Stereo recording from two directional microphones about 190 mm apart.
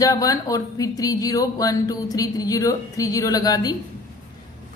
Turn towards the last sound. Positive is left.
turn(degrees=20)  # may be behind; listen again after turning